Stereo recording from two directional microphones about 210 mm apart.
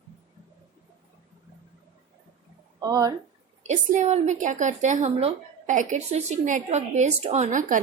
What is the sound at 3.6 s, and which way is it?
A woman's voice, 35° right (ahead or behind).